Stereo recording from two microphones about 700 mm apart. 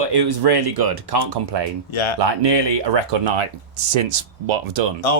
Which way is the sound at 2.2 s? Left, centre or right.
Right.